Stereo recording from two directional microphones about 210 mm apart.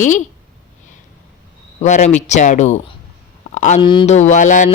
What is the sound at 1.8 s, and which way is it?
Speech, 35° left (ahead or behind).